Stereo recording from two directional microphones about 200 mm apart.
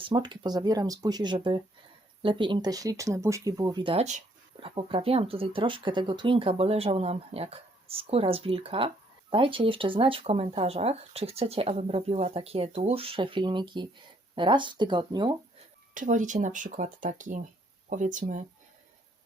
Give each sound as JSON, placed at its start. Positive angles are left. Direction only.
{"t": 0.0, "sound": "speech", "side_deg": -25}
{"t": 16.0, "sound": "speech", "side_deg": -40}